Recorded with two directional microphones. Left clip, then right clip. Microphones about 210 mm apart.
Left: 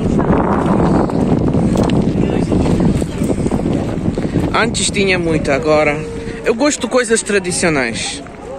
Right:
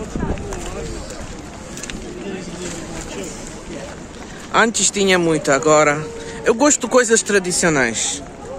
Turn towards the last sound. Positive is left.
turn(degrees=-10)  # may be behind; listen again after turning